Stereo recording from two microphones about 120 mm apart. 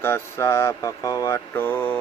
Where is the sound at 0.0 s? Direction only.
20° left (ahead or behind).